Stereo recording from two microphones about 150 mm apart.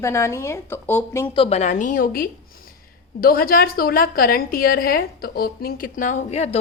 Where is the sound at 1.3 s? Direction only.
40° left (ahead or behind).